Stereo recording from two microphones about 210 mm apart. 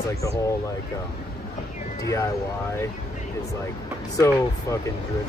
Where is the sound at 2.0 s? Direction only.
15° left (ahead or behind).